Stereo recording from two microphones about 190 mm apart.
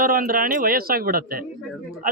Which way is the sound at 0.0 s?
45° right (ahead or behind).